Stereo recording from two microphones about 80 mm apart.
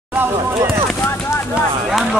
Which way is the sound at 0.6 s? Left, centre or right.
Right.